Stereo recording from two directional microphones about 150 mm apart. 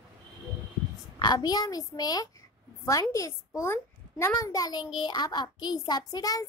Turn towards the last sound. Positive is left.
turn(degrees=25)  # may be behind; listen again after turning